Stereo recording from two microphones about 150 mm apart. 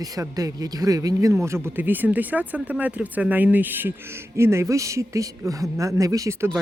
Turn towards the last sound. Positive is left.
turn(degrees=-20)  # may be behind; listen again after turning